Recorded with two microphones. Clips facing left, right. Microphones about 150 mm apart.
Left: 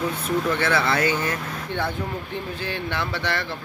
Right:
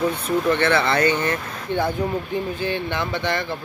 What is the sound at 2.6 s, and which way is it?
Speech, centre (ahead or behind).